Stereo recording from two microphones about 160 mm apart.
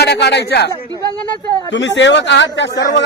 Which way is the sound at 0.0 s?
90° left.